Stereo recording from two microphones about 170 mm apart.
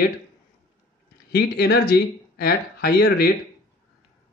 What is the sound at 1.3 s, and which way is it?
Speech, 70° left (ahead or behind).